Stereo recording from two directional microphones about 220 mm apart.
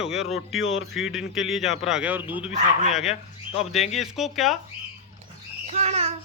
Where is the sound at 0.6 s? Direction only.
60° left (ahead or behind).